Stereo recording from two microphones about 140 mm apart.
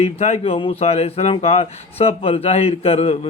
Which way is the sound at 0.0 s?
50° left (ahead or behind).